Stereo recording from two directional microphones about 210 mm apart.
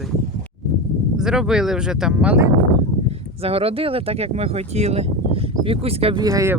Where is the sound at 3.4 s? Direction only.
25° right (ahead or behind).